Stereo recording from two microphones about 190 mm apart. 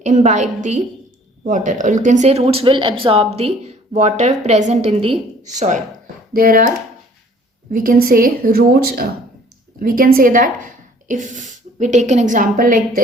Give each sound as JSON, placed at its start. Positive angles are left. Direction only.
{"t": 0.0, "sound": "a woman's voice", "side_deg": -40}